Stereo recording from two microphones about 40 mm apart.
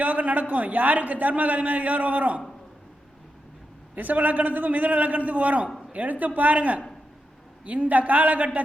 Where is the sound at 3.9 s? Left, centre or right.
Right.